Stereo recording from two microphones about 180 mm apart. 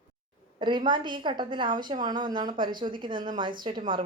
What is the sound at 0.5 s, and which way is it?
A woman's voice, 25° right (ahead or behind).